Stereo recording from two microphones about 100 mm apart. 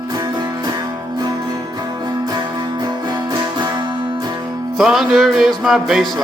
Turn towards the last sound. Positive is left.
turn(degrees=0)  # may be behind; listen again after turning